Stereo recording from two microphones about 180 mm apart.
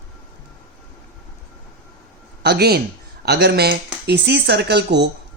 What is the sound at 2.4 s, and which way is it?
A man's voice, 65° right (ahead or behind).